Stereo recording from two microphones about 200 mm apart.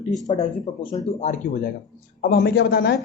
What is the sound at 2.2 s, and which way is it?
Speech, 55° left (ahead or behind).